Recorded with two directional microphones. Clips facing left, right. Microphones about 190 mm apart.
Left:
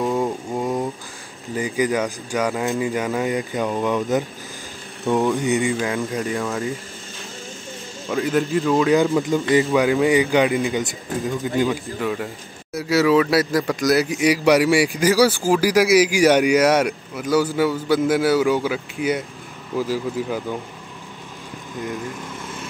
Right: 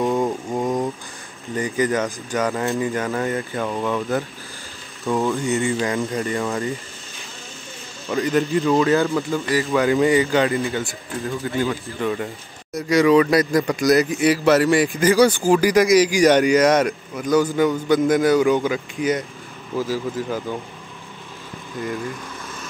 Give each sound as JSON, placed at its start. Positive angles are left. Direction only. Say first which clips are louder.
{"t": 0.0, "sound": "a sound", "louder": "right 1 dB", "side_deg": 0}
{"t": 1.5, "sound": "a man's voice", "louder": "even", "side_deg": 10}
{"t": 5.7, "sound": "a man's voice", "louder": "right 1 dB", "side_deg": 0}
{"t": 8.1, "sound": "a man's voice", "louder": "right 1 dB", "side_deg": 0}
{"t": 8.9, "sound": "a man's voice", "louder": "left 2 dB", "side_deg": 15}
{"t": 12.0, "sound": "a man's voice", "louder": "right 1 dB", "side_deg": 5}
{"t": 14.0, "sound": "a man's voice", "louder": "even", "side_deg": 10}